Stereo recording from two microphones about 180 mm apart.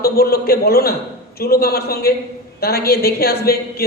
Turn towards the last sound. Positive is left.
turn(degrees=60)  # may be behind; listen again after turning